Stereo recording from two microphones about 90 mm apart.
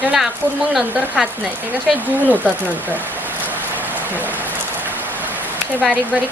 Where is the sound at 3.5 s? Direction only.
20° right (ahead or behind).